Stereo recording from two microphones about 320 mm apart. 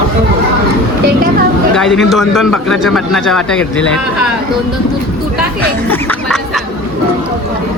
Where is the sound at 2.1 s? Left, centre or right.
Centre.